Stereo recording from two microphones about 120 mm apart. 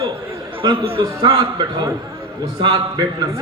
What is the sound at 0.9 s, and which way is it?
Speech, 50° right (ahead or behind).